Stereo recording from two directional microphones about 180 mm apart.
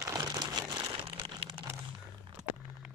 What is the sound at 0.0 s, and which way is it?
Crumpling, 20° right (ahead or behind).